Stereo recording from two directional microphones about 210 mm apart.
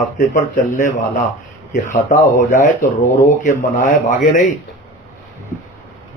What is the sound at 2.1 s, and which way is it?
Speech, 40° left (ahead or behind).